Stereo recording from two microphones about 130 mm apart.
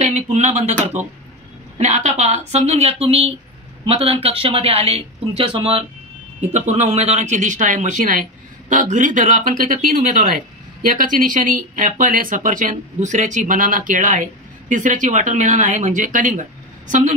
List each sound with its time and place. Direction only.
0.0 s speech: 65° right (ahead or behind)
1.8 s speech: 60° right (ahead or behind); by 5.9 s 45° right (ahead or behind)
6.4 s speech: 60° right (ahead or behind)